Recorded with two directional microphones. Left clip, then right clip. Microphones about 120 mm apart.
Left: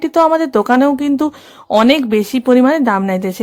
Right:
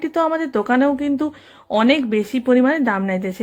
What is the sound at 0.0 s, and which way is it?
Speech, 35° left (ahead or behind).